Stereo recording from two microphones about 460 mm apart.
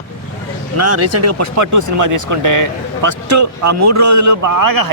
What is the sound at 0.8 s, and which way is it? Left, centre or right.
Speech, right.